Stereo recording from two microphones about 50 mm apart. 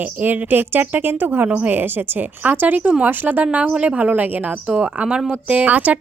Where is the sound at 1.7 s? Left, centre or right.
Right.